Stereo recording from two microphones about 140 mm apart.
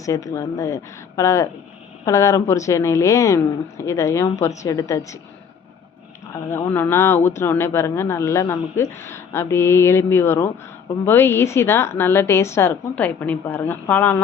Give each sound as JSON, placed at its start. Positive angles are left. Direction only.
{"t": 0.0, "sound": "speech", "side_deg": 25}
{"t": 6.5, "sound": "a woman's voice", "side_deg": 15}